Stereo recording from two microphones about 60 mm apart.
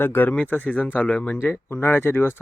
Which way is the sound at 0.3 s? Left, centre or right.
Left.